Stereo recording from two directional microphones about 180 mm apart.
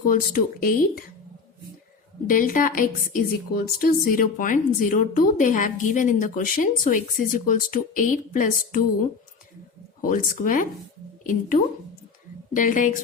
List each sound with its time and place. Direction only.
0.0 s speech: 50° left (ahead or behind)
2.2 s speech: 50° left (ahead or behind)
10.0 s a woman's voice: 50° left (ahead or behind)